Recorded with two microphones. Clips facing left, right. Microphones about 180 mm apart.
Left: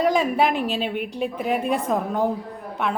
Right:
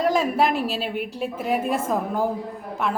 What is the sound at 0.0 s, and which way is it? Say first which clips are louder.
A woman's voice: left 1 dB; centre (ahead or behind).